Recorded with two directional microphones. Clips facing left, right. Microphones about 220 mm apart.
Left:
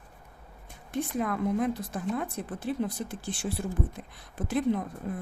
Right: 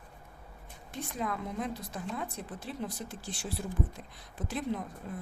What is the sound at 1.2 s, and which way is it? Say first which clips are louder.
A woman's voice: left 6 dB; 55° left (ahead or behind).